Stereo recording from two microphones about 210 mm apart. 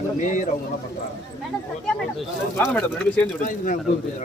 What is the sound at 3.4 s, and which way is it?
Speech, 40° left (ahead or behind).